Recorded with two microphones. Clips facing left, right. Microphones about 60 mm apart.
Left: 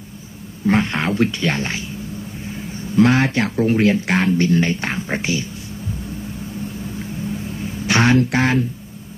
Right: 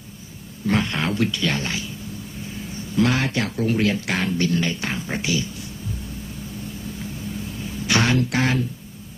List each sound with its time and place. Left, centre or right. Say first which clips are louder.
0.7 s speech: left 4 dB; left
3.0 s speech: left 6 dB; left
7.8 s speech: left 5 dB; left